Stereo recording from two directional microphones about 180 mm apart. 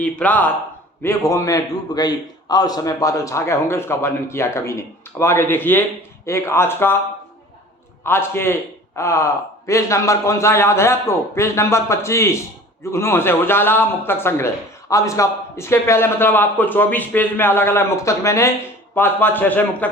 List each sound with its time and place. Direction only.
0.0 s a man's voice: 10° left (ahead or behind)
8.0 s a man's voice: 15° left (ahead or behind)